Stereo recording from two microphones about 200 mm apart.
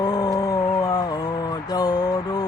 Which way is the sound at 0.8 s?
20° left (ahead or behind).